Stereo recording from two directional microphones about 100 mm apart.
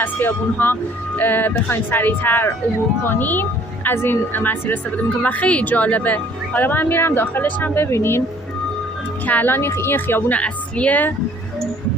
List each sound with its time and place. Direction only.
0.0 s speech: 20° left (ahead or behind)
9.2 s speech: 20° left (ahead or behind)